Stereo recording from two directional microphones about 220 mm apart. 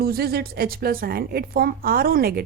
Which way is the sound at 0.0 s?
45° right (ahead or behind).